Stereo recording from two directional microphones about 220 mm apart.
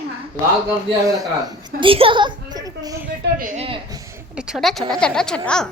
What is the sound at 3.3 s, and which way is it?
Speech, 35° right (ahead or behind).